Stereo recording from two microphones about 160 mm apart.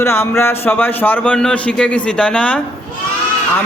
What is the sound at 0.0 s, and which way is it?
Speech, 15° left (ahead or behind).